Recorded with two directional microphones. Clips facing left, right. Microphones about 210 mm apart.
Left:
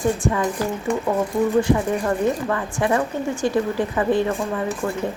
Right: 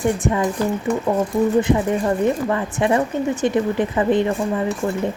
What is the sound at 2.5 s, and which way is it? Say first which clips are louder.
A woman's voice: right 2 dB; 20° right (ahead or behind).